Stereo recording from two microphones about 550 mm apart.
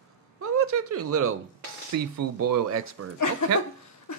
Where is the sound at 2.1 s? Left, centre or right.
Right.